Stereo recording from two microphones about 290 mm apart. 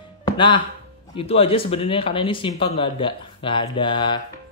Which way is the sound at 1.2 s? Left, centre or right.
Centre.